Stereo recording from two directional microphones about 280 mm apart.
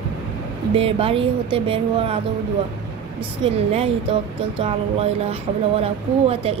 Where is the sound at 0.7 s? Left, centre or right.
Centre.